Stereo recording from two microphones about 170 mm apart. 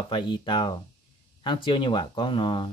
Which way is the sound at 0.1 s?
30° left (ahead or behind).